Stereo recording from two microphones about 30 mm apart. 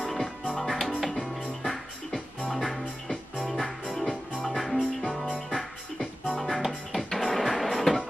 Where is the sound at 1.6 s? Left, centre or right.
Left.